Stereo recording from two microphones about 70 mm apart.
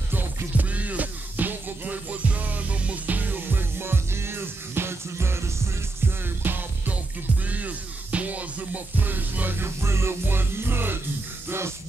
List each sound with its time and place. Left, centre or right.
0.6 s music: right